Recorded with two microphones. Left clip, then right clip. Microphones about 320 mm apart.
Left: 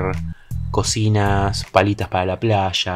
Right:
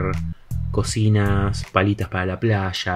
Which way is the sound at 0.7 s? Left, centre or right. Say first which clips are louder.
Left 3 dB; centre.